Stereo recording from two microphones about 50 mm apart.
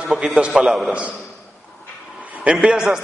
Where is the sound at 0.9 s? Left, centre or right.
Right.